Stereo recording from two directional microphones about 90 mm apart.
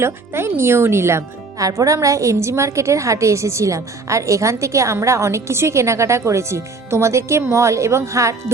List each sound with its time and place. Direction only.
0.0 s speech: 25° right (ahead or behind)